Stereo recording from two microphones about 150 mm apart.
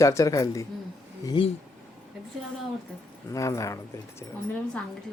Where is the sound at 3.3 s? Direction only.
20° left (ahead or behind).